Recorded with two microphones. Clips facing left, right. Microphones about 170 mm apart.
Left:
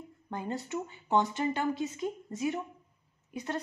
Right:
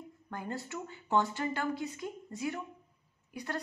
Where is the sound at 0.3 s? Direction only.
20° left (ahead or behind).